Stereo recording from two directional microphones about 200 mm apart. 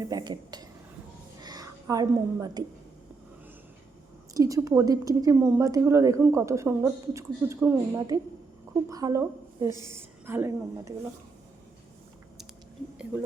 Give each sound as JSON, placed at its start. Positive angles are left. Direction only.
{"t": 0.0, "sound": "a woman's voice", "side_deg": -20}
{"t": 1.4, "sound": "a sound", "side_deg": -20}
{"t": 4.4, "sound": "a woman's voice", "side_deg": -15}